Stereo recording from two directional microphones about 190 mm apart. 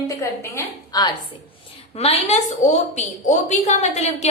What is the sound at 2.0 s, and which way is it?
A woman's voice, 35° left (ahead or behind).